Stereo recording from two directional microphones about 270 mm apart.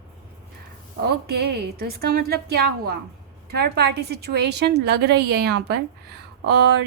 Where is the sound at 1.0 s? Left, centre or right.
Right.